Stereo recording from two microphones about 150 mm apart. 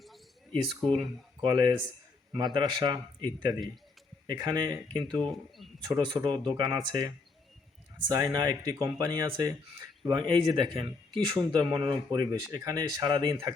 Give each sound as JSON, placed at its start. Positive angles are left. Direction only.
{"t": 0.5, "sound": "speech", "side_deg": -35}
{"t": 5.3, "sound": "speech", "side_deg": 0}
{"t": 6.1, "sound": "speech", "side_deg": -30}